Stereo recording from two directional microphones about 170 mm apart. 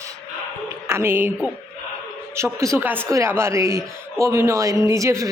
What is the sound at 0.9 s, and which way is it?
Speech, 15° right (ahead or behind).